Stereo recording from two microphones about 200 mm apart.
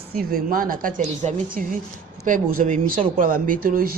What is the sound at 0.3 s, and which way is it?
Speech, 45° right (ahead or behind).